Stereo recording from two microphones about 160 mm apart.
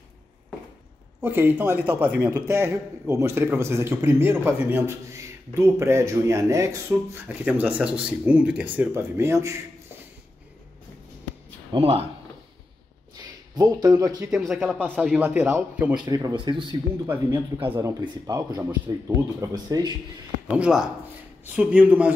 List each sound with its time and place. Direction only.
1.2 s a man's voice: 15° right (ahead or behind)
11.7 s speech: 35° right (ahead or behind)
13.6 s speech: 25° right (ahead or behind)
14.3 s a man's voice: centre (ahead or behind)
16.1 s speech: 25° right (ahead or behind)
17.6 s speech: 15° right (ahead or behind)
20.4 s a man's voice: 5° right (ahead or behind)